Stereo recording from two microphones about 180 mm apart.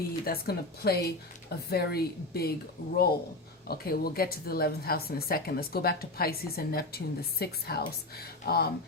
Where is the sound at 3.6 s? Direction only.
55° left (ahead or behind).